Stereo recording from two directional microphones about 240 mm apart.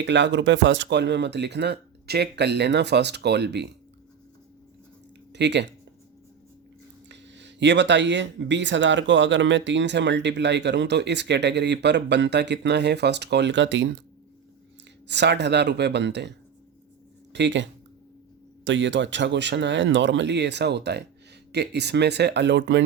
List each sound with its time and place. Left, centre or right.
0.0 s speech: right
5.3 s speech: right
7.1 s speech: right
15.0 s speech: right
17.3 s speech: right